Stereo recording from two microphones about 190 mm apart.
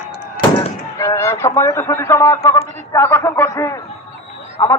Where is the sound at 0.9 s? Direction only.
15° left (ahead or behind).